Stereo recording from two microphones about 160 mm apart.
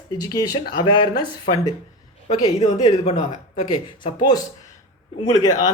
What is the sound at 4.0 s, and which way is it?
Speech, 30° left (ahead or behind).